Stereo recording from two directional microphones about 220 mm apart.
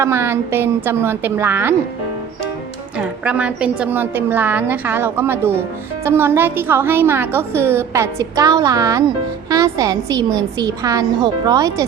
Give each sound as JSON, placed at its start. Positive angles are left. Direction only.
{"t": 0.0, "sound": "a woman's voice", "side_deg": -10}
{"t": 3.0, "sound": "a woman's voice", "side_deg": -5}